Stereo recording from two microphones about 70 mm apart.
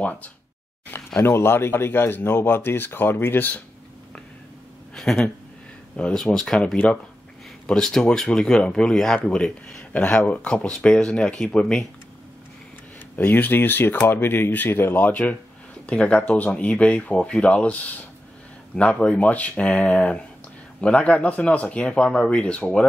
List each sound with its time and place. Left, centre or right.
1.2 s speech: left
4.9 s speech: centre
9.9 s speech: left
13.2 s speech: left; by 22.8 s centre